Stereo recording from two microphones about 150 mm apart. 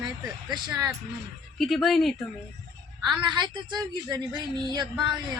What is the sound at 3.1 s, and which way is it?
A woman's voice, 30° right (ahead or behind).